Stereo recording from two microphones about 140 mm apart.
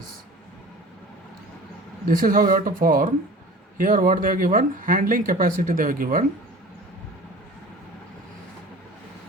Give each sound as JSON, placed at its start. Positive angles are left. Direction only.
{"t": 2.0, "sound": "speech", "side_deg": -90}